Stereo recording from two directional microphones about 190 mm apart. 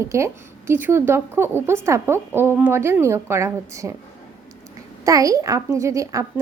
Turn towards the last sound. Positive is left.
turn(degrees=-15)  # may be behind; listen again after turning